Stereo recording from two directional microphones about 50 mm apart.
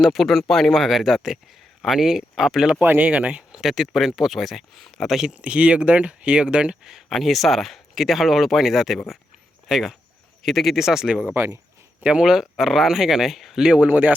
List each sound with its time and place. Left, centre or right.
0.0 s speech: centre
2.8 s speech: right
3.1 s speech: right
3.6 s speech: centre
5.3 s speech: right
7.1 s speech: centre
12.2 s speech: centre
13.7 s speech: right